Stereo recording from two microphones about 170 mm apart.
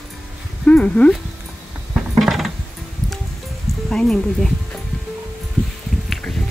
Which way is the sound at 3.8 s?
Centre (ahead or behind).